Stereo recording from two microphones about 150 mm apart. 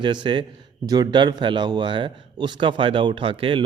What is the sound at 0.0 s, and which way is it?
A man's voice, 30° right (ahead or behind).